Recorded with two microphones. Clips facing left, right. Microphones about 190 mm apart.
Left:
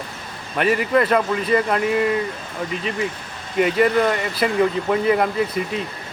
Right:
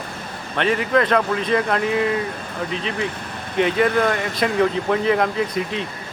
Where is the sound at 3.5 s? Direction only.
5° left (ahead or behind).